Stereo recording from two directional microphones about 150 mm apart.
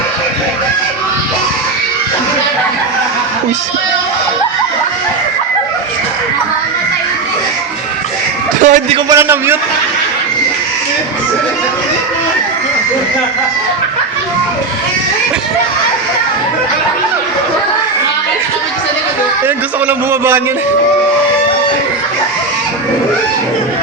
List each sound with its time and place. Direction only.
8.6 s a man's voice: 55° right (ahead or behind)
9.0 s a man's voice: 15° right (ahead or behind)
19.9 s a man's voice: 15° right (ahead or behind)